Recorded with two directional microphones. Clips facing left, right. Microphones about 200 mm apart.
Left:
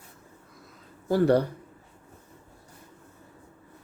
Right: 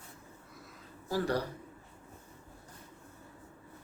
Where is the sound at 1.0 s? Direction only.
60° left (ahead or behind).